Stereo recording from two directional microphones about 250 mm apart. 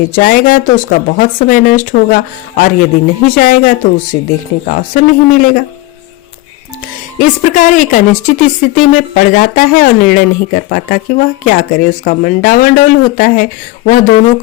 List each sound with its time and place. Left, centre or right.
0.2 s speech: left
7.2 s speech: left